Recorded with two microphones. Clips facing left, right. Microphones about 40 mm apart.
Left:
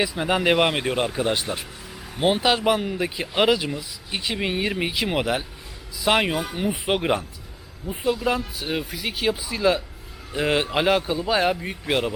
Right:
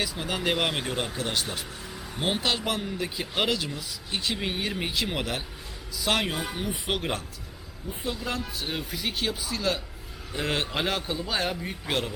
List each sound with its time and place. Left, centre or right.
0.0 s speech: centre